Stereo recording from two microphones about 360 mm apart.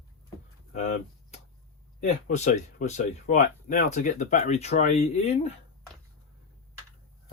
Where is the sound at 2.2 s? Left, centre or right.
Centre.